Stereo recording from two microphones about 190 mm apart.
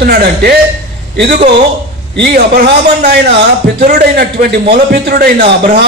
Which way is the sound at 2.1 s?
55° right (ahead or behind).